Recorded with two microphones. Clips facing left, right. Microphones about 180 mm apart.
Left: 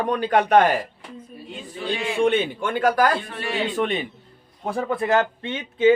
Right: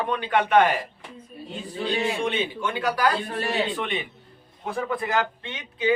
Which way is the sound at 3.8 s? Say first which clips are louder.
Left 6 dB; 40° left (ahead or behind).